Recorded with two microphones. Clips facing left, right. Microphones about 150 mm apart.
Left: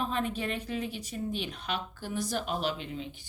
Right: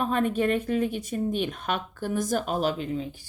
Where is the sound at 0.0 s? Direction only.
50° right (ahead or behind).